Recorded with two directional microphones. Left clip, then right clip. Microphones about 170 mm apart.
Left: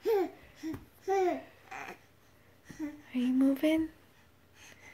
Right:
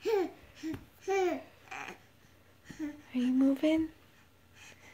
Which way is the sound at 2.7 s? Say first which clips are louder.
Even; 10° right (ahead or behind).